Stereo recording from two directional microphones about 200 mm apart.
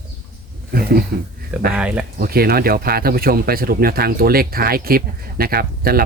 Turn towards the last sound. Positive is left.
turn(degrees=-50)  # may be behind; listen again after turning